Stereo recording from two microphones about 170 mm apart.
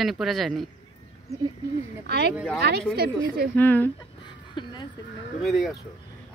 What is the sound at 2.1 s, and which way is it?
Speech, 80° right.